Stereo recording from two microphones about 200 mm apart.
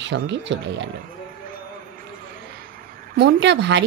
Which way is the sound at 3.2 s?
60° right (ahead or behind).